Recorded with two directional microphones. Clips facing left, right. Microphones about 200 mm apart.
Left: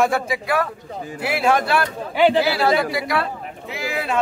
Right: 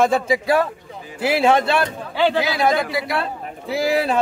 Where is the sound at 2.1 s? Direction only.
15° left (ahead or behind).